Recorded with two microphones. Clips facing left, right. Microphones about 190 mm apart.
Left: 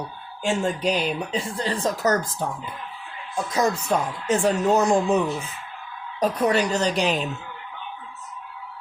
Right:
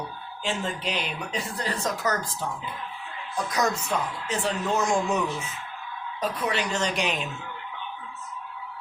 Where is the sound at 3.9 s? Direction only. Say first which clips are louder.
Left 6 dB; 50° left (ahead or behind); by 5.6 s 30° left (ahead or behind).